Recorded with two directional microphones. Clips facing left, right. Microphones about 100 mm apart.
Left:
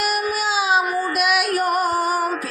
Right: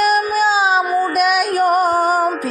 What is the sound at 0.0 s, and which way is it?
Music, 35° right (ahead or behind).